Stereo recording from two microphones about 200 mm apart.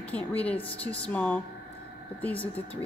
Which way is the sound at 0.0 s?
10° left (ahead or behind).